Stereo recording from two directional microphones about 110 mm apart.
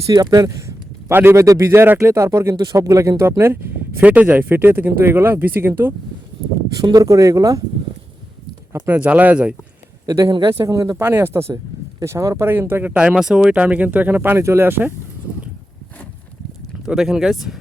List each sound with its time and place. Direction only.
0.1 s speech: 35° right (ahead or behind)
1.0 s speech: 20° right (ahead or behind)
6.7 s speech: 35° right (ahead or behind)
8.7 s speech: 15° right (ahead or behind)
10.1 s speech: 35° right (ahead or behind)
10.5 s speech: 30° right (ahead or behind)
10.9 s speech: 20° right (ahead or behind)
16.8 s speech: 5° right (ahead or behind)